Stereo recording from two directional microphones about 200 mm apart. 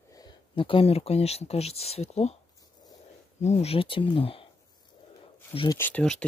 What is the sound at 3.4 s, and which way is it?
Speech, 35° left (ahead or behind).